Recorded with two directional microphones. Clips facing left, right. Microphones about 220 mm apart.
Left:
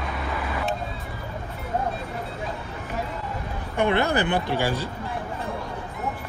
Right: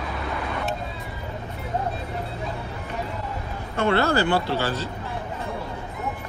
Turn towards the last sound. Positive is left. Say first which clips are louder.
# even
turn(degrees=15)  # may be behind; listen again after turning